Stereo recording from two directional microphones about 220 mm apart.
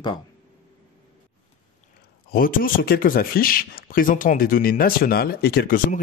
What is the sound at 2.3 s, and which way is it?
Speech, 40° left (ahead or behind).